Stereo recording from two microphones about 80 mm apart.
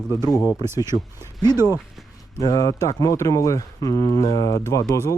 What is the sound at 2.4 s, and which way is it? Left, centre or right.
Speech, left.